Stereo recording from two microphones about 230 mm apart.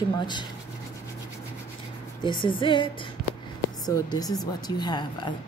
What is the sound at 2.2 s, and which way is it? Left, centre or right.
Speech, left.